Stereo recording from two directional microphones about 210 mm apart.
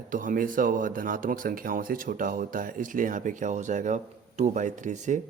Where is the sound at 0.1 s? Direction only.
40° right (ahead or behind).